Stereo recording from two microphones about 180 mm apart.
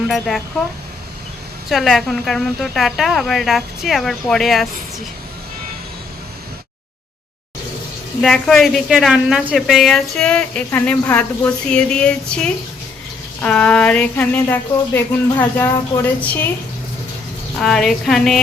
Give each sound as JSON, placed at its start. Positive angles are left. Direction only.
{"t": 0.1, "sound": "a woman's voice", "side_deg": 0}
{"t": 1.7, "sound": "a woman's voice", "side_deg": 0}
{"t": 8.2, "sound": "a woman's voice", "side_deg": 0}
{"t": 17.6, "sound": "a woman's voice", "side_deg": 5}